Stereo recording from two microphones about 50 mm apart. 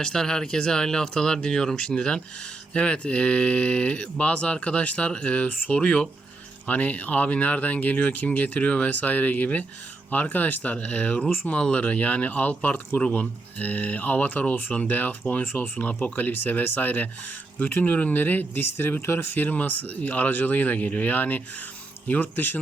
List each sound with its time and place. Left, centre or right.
0.0 s speech: centre; by 22.5 s left